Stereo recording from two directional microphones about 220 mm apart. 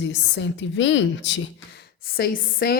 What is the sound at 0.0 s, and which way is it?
A woman's voice, 55° left (ahead or behind).